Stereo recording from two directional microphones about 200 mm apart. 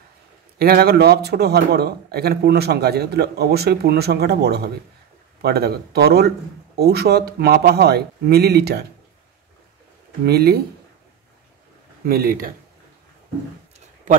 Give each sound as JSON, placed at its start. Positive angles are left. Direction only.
{"t": 0.6, "sound": "speech", "side_deg": -50}
{"t": 10.2, "sound": "speech", "side_deg": -50}
{"t": 12.1, "sound": "speech", "side_deg": -45}